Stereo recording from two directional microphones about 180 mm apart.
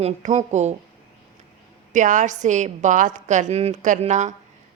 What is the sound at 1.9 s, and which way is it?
A woman's voice, 45° right (ahead or behind).